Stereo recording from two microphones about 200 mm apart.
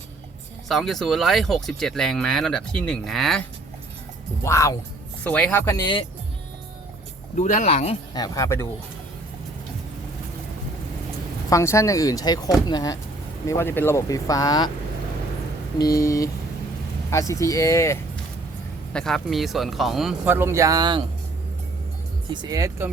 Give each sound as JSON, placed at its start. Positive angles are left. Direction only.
{"t": 0.7, "sound": "speech", "side_deg": 0}
{"t": 4.4, "sound": "speech", "side_deg": 15}
{"t": 7.3, "sound": "speech", "side_deg": 35}
{"t": 8.1, "sound": "speech", "side_deg": 20}
{"t": 11.4, "sound": "speech", "side_deg": 15}
{"t": 15.8, "sound": "speech", "side_deg": 15}
{"t": 18.9, "sound": "speech", "side_deg": 0}
{"t": 22.3, "sound": "speech", "side_deg": -20}